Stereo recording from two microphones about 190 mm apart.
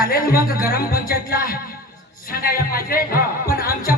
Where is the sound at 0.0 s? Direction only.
50° left (ahead or behind).